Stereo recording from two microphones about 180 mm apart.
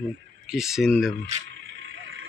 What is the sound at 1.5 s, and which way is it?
Vehicle, 90° right.